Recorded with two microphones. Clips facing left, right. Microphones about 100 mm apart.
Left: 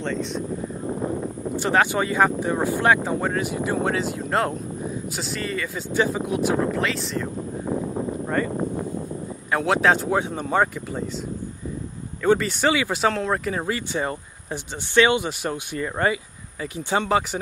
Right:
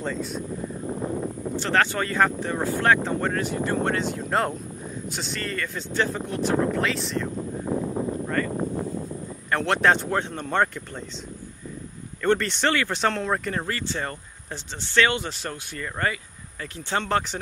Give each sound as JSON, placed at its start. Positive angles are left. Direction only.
{"t": 0.0, "sound": "speech", "side_deg": -5}
{"t": 1.6, "sound": "speech", "side_deg": 15}
{"t": 8.4, "sound": "speech", "side_deg": 15}
{"t": 9.5, "sound": "speech", "side_deg": 5}
{"t": 12.2, "sound": "speech", "side_deg": 5}